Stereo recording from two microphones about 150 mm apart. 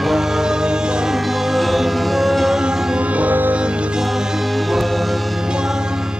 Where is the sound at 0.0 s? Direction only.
Centre (ahead or behind).